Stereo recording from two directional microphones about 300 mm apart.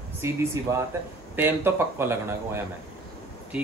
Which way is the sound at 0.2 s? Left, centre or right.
Centre.